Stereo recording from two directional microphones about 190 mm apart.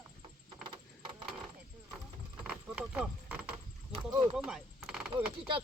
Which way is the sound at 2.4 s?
5° right (ahead or behind).